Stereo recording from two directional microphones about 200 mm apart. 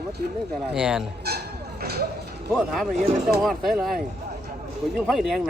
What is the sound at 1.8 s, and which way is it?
Speech, 50° right (ahead or behind).